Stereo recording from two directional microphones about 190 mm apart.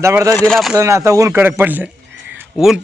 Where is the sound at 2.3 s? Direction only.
5° right (ahead or behind).